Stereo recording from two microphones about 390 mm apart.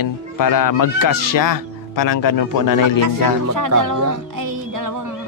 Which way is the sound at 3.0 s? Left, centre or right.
Right.